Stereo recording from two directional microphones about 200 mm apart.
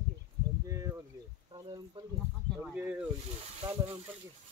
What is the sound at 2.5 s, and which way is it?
Speech, 5° right (ahead or behind).